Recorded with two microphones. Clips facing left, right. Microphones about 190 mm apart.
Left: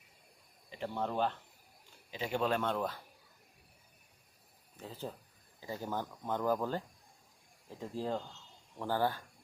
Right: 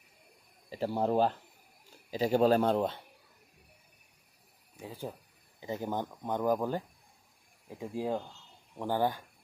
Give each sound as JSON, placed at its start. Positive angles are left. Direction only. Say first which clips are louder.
{"t": 0.7, "sound": "a man's voice", "louder": "right 7 dB", "side_deg": -35}
{"t": 4.8, "sound": "speech", "louder": "right 2 dB", "side_deg": -10}